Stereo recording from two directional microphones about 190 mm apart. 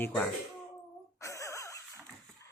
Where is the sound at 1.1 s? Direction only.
15° left (ahead or behind).